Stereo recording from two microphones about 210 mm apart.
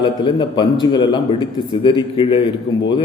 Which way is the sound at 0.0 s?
25° left (ahead or behind).